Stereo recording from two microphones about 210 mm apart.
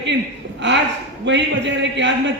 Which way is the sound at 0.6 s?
60° right (ahead or behind).